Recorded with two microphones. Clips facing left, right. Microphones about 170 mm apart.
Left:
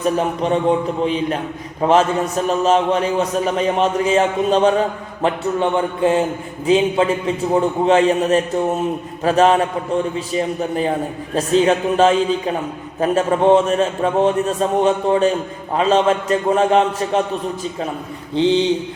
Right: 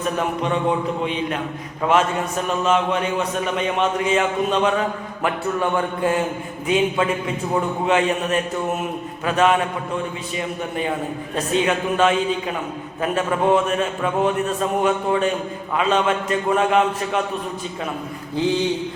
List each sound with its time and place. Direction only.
0.2 s a man's voice: 35° left (ahead or behind)
18.3 s speech: 25° left (ahead or behind)